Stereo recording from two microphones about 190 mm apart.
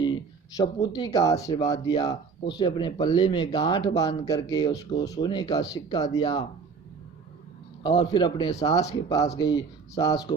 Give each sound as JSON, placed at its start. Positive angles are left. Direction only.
{"t": 0.0, "sound": "speech", "side_deg": 20}
{"t": 7.9, "sound": "speech", "side_deg": 20}